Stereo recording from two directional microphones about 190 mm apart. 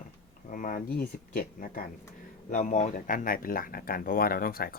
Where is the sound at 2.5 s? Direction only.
40° left (ahead or behind).